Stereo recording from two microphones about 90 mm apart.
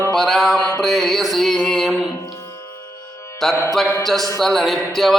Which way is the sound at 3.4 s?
5° left (ahead or behind).